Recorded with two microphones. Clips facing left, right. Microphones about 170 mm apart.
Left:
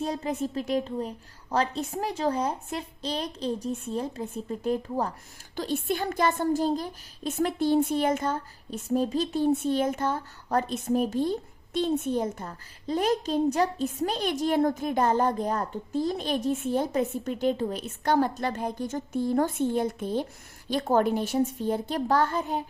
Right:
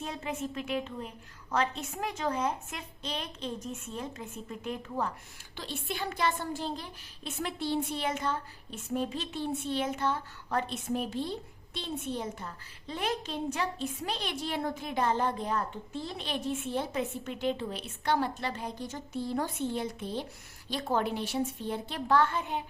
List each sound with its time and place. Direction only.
0.0 s a woman's voice: 35° left (ahead or behind)